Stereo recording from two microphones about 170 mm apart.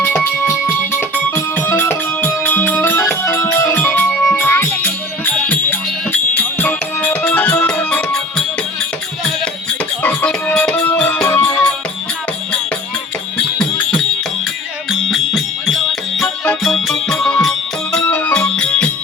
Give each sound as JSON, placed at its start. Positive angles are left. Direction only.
{"t": 0.0, "sound": "music", "side_deg": 15}
{"t": 10.0, "sound": "music", "side_deg": 5}
{"t": 14.8, "sound": "music", "side_deg": 0}